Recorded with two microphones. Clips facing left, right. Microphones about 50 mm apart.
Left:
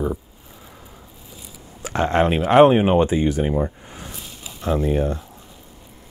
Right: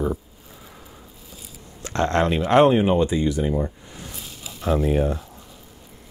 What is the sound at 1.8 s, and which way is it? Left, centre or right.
Speech, centre.